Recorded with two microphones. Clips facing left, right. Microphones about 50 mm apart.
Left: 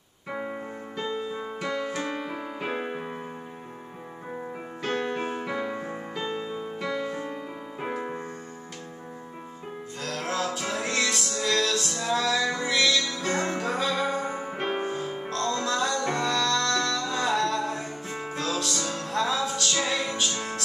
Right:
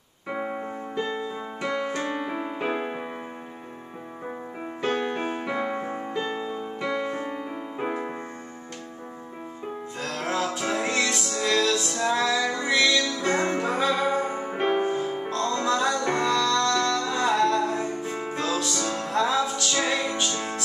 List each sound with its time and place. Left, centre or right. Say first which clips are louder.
0.3 s piano: right 3 dB; centre
1.1 s music: even; centre
1.7 s keyboard: right 3 dB; centre
4.8 s keyboard: right 2 dB; centre
5.3 s music: right 2 dB; centre
6.1 s music: right 1 dB; centre
9.9 s music: right 2 dB; centre